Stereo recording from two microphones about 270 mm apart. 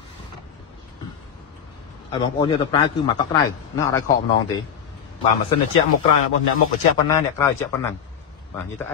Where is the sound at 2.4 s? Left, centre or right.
Centre.